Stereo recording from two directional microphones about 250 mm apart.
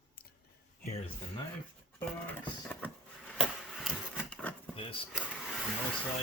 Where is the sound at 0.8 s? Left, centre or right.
Left.